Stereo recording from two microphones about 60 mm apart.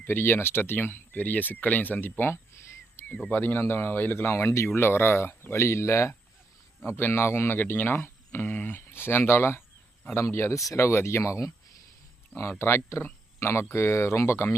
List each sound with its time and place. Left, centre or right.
0.0 s speech: left
6.8 s speech: left